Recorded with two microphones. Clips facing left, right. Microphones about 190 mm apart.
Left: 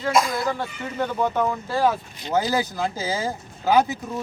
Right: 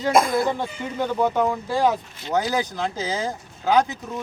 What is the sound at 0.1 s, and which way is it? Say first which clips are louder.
Speech: right 3 dB; 50° right (ahead or behind).